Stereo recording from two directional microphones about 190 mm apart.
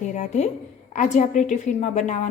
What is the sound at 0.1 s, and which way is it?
A woman's voice, 40° left (ahead or behind).